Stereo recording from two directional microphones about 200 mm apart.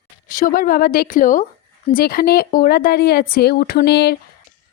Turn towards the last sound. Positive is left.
turn(degrees=55)  # may be behind; listen again after turning